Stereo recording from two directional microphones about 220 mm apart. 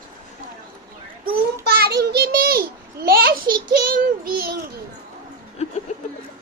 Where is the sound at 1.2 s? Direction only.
45° right (ahead or behind).